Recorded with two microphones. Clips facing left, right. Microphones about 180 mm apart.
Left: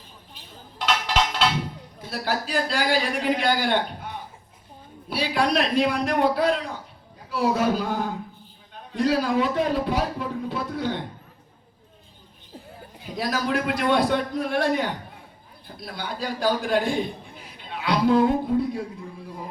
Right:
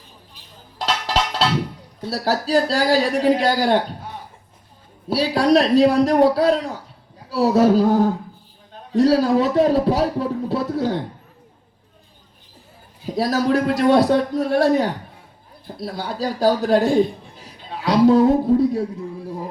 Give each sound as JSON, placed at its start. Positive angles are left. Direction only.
{"t": 0.8, "sound": "music", "side_deg": -35}
{"t": 2.0, "sound": "speech", "side_deg": -35}
{"t": 5.0, "sound": "speech", "side_deg": -40}
{"t": 13.1, "sound": "a man's voice", "side_deg": -40}